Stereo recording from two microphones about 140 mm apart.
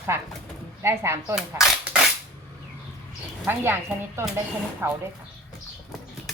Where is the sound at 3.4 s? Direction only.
15° right (ahead or behind).